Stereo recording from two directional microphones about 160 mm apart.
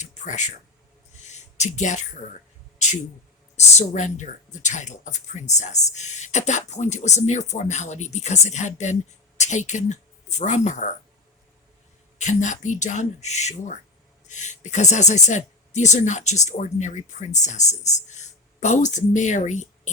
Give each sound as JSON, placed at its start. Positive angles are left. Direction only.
{"t": 0.0, "sound": "a sound", "side_deg": 50}
{"t": 3.5, "sound": "speech", "side_deg": 45}
{"t": 12.2, "sound": "speech", "side_deg": 50}